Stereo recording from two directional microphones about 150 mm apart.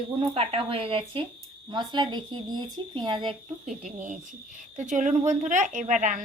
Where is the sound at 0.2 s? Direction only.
40° right (ahead or behind).